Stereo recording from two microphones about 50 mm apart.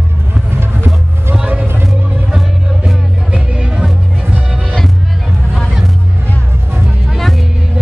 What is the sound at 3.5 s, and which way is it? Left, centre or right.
Music, right.